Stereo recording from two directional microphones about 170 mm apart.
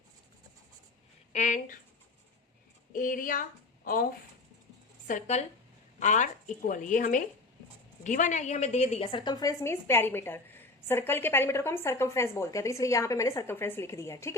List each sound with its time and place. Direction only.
1.3 s speech: 45° left (ahead or behind)
2.9 s speech: 55° left (ahead or behind)
5.0 s a woman's voice: 45° left (ahead or behind); by 14.3 s 15° left (ahead or behind)